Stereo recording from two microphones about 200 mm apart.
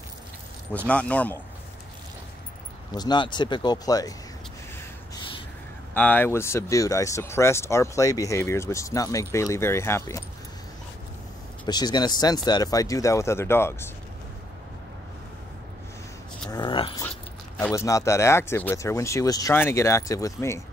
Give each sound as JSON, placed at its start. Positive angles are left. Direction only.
{"t": 0.8, "sound": "speech", "side_deg": 5}
{"t": 2.9, "sound": "speech", "side_deg": 20}
{"t": 5.9, "sound": "speech", "side_deg": 10}
{"t": 11.6, "sound": "speech", "side_deg": 20}
{"t": 16.4, "sound": "speech", "side_deg": 20}